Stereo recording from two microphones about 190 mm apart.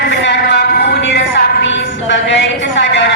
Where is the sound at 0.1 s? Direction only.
60° left (ahead or behind).